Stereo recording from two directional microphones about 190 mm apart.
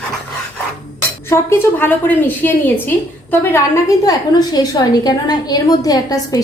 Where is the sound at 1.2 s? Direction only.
15° left (ahead or behind).